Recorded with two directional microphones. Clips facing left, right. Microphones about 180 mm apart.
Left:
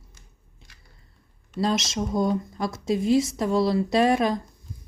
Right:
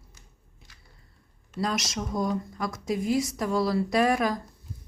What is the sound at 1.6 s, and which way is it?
Speech, 25° left (ahead or behind).